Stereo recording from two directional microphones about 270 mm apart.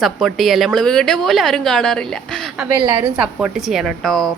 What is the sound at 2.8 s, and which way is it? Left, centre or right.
Speech, centre.